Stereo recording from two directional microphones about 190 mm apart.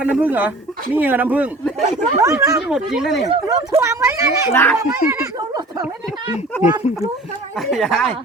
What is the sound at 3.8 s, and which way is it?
Speech, 15° right (ahead or behind).